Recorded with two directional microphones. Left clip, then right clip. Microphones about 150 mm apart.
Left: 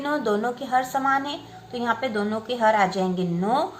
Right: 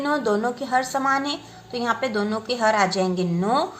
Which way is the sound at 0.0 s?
30° right (ahead or behind).